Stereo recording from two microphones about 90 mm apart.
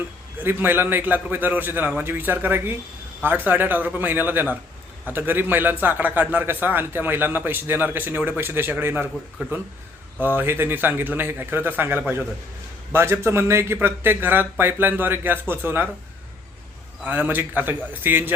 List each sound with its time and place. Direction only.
0.3 s a man's voice: 25° right (ahead or behind)
17.0 s a man's voice: 20° right (ahead or behind)